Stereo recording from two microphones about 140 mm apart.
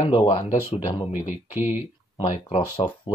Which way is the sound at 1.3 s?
15° right (ahead or behind).